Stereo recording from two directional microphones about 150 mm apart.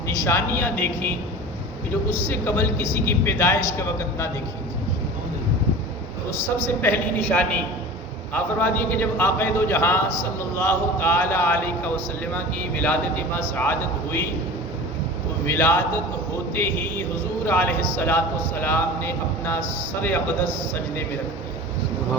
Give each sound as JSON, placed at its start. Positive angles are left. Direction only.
{"t": 0.1, "sound": "a man's voice", "side_deg": 20}
{"t": 6.8, "sound": "a man's voice", "side_deg": 10}
{"t": 15.4, "sound": "a man's voice", "side_deg": 15}